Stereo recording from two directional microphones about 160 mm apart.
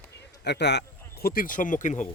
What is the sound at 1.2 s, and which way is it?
Speech, 65° left (ahead or behind).